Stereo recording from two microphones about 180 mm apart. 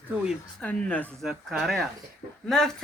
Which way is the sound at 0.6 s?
5° left (ahead or behind).